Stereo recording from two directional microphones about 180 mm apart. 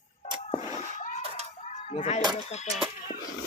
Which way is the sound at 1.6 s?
35° left (ahead or behind).